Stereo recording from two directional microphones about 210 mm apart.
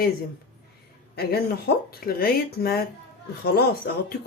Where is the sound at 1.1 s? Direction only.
50° left (ahead or behind).